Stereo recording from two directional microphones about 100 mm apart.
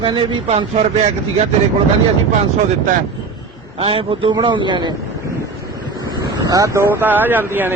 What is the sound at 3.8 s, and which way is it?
A man's voice, 70° right (ahead or behind).